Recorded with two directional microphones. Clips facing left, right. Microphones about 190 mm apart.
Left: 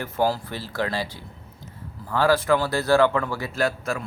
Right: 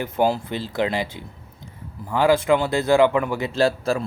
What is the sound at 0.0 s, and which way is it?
Speech, 20° right (ahead or behind).